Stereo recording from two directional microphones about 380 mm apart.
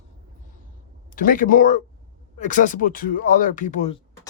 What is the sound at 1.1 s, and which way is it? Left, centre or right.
Speech, left.